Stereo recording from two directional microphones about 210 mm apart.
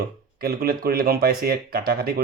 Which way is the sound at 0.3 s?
45° right (ahead or behind).